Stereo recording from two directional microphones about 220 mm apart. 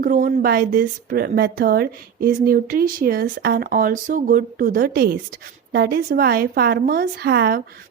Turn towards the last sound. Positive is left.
turn(degrees=-45)  # may be behind; listen again after turning